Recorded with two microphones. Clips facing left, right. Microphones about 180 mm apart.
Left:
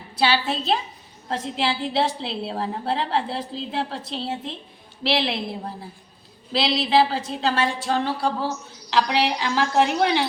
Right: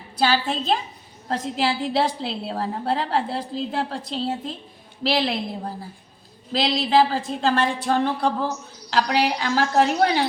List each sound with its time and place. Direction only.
0.2 s a woman's voice: 45° right (ahead or behind)
6.5 s a woman's voice: 45° right (ahead or behind)
7.9 s a sound: 55° right (ahead or behind)
8.9 s a woman's voice: 40° right (ahead or behind)